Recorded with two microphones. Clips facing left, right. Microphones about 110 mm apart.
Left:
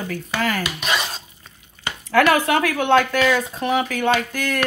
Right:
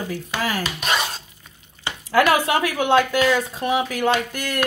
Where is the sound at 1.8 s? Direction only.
10° right (ahead or behind).